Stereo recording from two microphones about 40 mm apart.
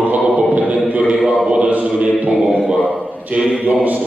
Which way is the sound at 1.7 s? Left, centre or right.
Right.